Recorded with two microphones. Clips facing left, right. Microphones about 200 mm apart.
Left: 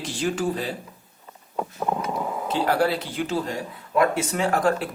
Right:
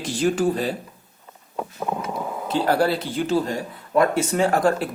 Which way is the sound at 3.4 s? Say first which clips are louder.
Right 3 dB; 40° right (ahead or behind).